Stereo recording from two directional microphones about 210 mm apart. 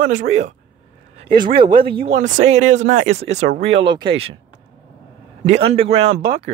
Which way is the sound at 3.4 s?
55° right (ahead or behind).